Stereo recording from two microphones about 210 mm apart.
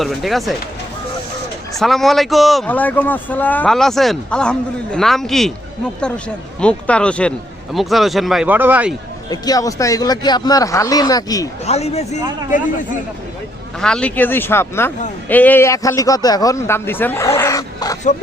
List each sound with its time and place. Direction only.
0.0 s a man's voice: centre (ahead or behind)
1.8 s a man's voice: centre (ahead or behind)
6.6 s a man's voice: 5° left (ahead or behind)
9.3 s a man's voice: 15° left (ahead or behind)
11.6 s speech: 30° left (ahead or behind)
13.8 s a man's voice: 5° left (ahead or behind)